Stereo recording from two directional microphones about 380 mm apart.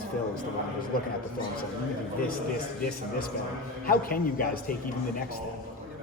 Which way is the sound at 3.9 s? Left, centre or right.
Left.